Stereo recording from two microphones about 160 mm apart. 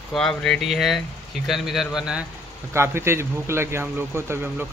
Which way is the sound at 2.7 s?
15° right (ahead or behind).